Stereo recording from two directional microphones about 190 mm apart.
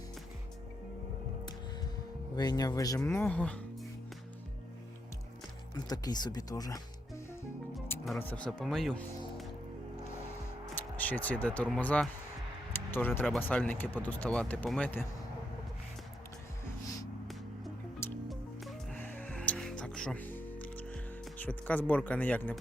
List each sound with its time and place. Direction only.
2.3 s speech: 20° left (ahead or behind)
5.7 s speech: 20° left (ahead or behind)
8.0 s speech: 5° left (ahead or behind)
10.8 s speech: 10° left (ahead or behind)
18.3 s music: centre (ahead or behind)